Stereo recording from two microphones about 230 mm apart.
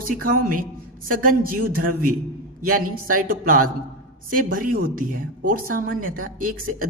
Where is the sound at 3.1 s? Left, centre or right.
Right.